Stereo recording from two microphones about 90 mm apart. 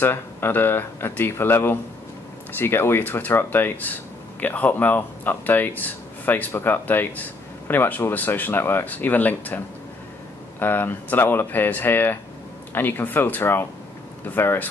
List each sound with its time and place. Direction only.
0.0 s speech: 25° left (ahead or behind)
10.6 s speech: 20° left (ahead or behind)